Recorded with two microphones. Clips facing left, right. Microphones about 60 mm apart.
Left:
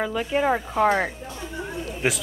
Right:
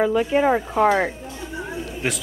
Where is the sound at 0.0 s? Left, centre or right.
Centre.